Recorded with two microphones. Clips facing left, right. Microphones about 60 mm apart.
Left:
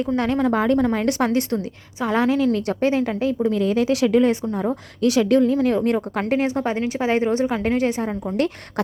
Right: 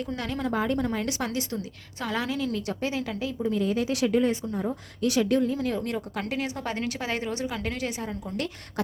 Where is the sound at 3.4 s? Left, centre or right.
Left.